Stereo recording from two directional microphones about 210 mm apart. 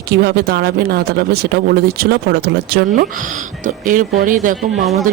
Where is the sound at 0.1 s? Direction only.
45° right (ahead or behind).